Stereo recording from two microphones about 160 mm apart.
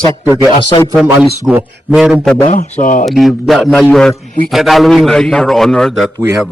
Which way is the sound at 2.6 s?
55° left (ahead or behind).